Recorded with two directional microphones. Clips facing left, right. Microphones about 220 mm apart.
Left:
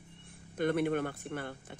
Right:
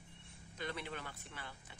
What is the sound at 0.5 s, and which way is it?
Speech, 55° left (ahead or behind).